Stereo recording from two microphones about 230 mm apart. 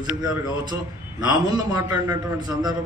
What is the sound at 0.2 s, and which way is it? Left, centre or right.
A man's voice, centre.